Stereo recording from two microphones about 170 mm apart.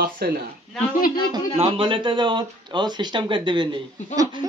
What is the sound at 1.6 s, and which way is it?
Speech, 30° right (ahead or behind).